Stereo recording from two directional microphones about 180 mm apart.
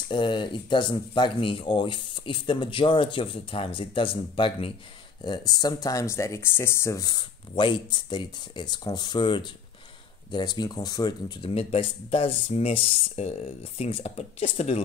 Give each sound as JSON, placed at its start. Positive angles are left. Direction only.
{"t": 0.1, "sound": "speech", "side_deg": 25}